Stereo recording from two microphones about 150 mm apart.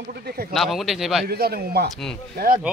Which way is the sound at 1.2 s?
90° right.